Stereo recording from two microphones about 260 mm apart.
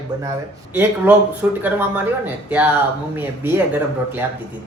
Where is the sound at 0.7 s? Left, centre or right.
Centre.